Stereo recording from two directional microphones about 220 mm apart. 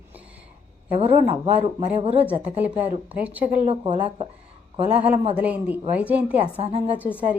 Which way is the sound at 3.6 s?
25° right (ahead or behind).